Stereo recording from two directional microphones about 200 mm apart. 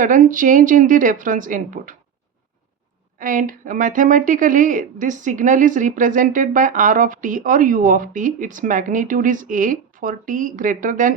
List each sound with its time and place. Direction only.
0.0 s a woman's voice: 40° right (ahead or behind)
3.2 s a woman's voice: 40° right (ahead or behind)